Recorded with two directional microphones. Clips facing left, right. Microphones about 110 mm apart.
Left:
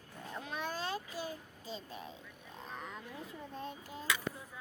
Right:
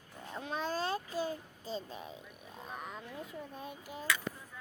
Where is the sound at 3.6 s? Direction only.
10° right (ahead or behind).